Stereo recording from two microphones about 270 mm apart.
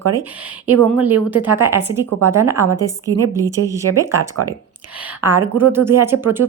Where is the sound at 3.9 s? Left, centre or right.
Right.